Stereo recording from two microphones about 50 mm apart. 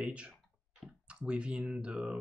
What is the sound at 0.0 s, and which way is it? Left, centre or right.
Speech, right.